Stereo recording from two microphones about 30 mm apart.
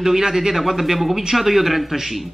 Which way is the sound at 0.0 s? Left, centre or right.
Centre.